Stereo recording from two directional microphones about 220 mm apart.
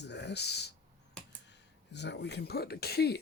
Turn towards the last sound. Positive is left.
turn(degrees=45)  # may be behind; listen again after turning